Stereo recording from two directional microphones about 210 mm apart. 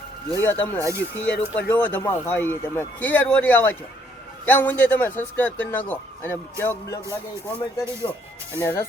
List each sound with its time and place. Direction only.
0.3 s speech: 10° left (ahead or behind)
8.0 s speech: 20° left (ahead or behind)